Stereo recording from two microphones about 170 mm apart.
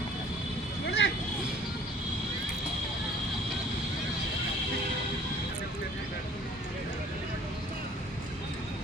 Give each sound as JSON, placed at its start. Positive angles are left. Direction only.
{"t": 0.9, "sound": "vehicle", "side_deg": 90}